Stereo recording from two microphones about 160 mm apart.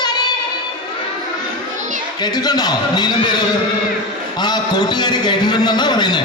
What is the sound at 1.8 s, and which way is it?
Children playing, 50° right (ahead or behind).